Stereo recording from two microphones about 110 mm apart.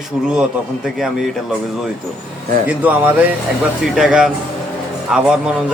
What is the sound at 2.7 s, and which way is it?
Speech, 15° right (ahead or behind).